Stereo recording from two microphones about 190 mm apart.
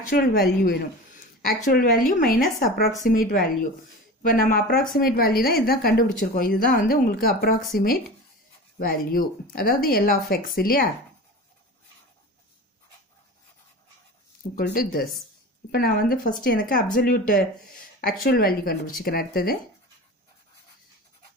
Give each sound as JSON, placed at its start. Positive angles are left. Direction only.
{"t": 0.0, "sound": "a woman's voice", "side_deg": 50}
{"t": 14.6, "sound": "a woman's voice", "side_deg": 50}